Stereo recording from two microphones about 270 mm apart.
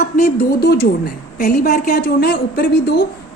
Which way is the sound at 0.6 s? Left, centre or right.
Left.